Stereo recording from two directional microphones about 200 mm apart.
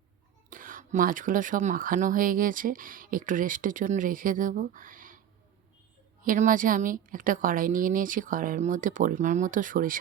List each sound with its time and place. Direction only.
0.5 s speech: 45° right (ahead or behind)
6.2 s speech: 40° right (ahead or behind)